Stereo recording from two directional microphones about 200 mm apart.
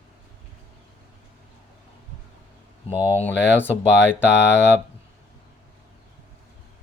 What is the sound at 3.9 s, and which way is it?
Speech, 65° left (ahead or behind).